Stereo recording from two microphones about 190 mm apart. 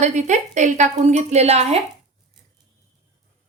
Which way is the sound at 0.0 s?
40° right (ahead or behind).